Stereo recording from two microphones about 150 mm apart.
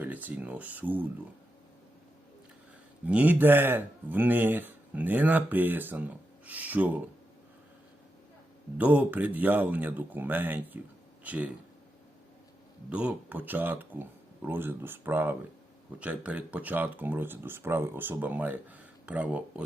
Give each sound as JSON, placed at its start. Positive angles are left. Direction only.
{"t": 0.0, "sound": "a man's voice", "side_deg": -10}
{"t": 3.1, "sound": "a man's voice", "side_deg": -10}
{"t": 8.8, "sound": "a man's voice", "side_deg": -10}
{"t": 12.9, "sound": "a man's voice", "side_deg": -10}